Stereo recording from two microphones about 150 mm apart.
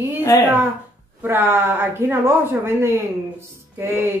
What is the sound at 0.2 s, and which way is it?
Speech, 15° left (ahead or behind).